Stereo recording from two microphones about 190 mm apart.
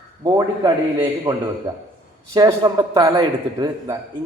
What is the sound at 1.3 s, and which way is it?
A man's voice, 25° right (ahead or behind).